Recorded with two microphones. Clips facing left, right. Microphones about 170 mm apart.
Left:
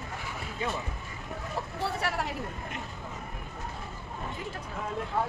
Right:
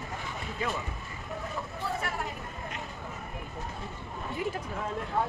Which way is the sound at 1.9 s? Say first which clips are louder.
Left 1 dB; 75° left (ahead or behind).